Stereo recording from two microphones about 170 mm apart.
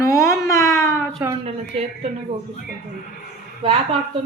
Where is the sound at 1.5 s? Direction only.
35° right (ahead or behind).